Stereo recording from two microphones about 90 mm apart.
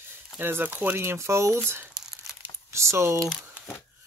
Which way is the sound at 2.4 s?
30° right (ahead or behind).